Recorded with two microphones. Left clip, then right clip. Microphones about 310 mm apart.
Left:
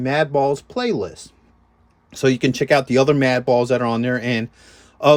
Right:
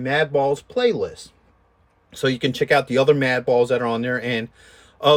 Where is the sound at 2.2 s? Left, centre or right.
Centre.